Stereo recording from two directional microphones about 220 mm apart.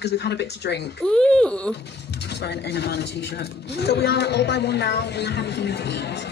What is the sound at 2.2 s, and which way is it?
A woman's voice, 50° left (ahead or behind).